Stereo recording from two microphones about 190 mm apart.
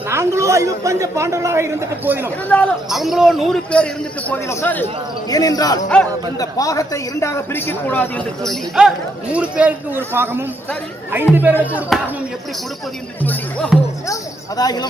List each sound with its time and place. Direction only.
0.1 s a man's voice: 15° right (ahead or behind)
2.5 s a man's voice: 5° left (ahead or behind)
8.8 s a man's voice: 5° right (ahead or behind)
13.2 s music: 5° left (ahead or behind)
14.1 s a sound: 20° left (ahead or behind)